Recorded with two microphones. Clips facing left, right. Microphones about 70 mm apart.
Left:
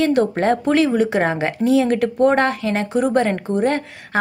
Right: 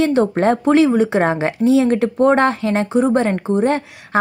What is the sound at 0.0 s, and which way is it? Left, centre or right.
Speech, right.